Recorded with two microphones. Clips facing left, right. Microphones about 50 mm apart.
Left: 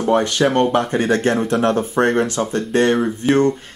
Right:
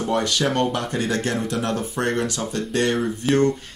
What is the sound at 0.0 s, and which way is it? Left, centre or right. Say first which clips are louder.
Speech: left 6 dB; left.